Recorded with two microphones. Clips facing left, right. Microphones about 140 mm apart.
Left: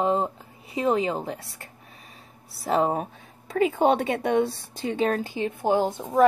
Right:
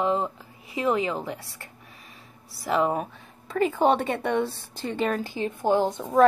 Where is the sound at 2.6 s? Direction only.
35° left (ahead or behind).